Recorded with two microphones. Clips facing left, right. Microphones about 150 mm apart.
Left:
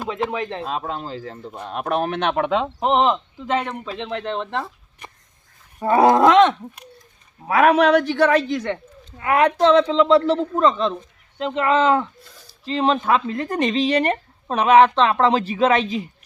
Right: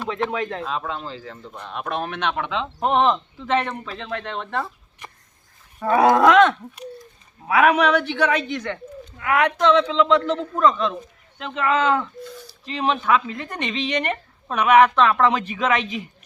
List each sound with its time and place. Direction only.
0.1 s speech: 10° left (ahead or behind)
0.9 s speech: 45° left (ahead or behind)
2.8 s speech: 15° left (ahead or behind)
5.8 s speech: 30° left (ahead or behind)
7.4 s a man's voice: 35° left (ahead or behind)